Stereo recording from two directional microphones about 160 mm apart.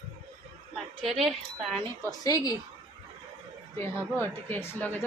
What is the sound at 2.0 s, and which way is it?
Speech, 20° left (ahead or behind).